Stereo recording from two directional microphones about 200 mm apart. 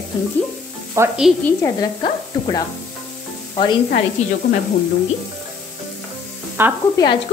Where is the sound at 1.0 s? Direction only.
5° right (ahead or behind).